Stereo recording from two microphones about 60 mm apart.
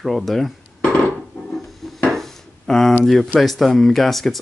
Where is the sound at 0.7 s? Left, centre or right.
Centre.